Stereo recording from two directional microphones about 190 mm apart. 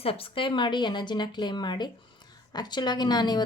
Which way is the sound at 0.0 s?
30° left (ahead or behind).